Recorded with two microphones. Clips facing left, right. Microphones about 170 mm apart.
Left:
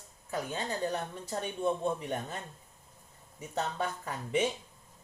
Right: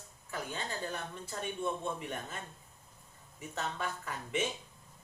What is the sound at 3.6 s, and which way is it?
Speech, 40° left (ahead or behind).